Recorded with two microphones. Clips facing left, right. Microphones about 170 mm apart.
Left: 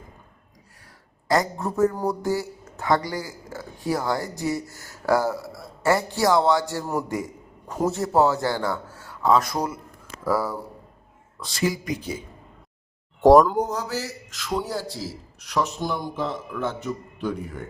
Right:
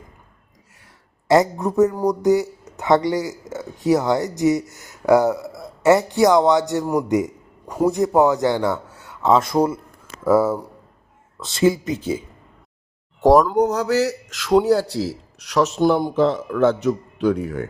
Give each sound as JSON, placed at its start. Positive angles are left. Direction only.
{"t": 1.3, "sound": "a man's voice", "side_deg": -20}
{"t": 13.2, "sound": "speech", "side_deg": 0}
{"t": 13.6, "sound": "a man's voice", "side_deg": -75}